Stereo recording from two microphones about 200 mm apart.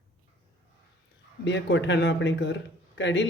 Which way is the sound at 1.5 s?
60° left (ahead or behind).